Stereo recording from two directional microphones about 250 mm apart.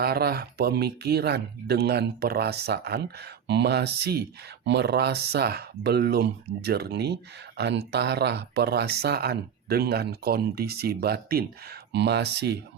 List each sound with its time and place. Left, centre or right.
0.0 s speech: right